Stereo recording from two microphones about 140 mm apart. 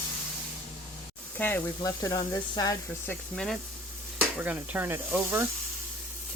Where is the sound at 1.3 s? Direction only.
15° left (ahead or behind).